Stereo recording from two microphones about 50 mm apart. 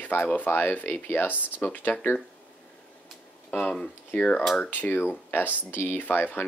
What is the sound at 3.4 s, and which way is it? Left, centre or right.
Speech, centre.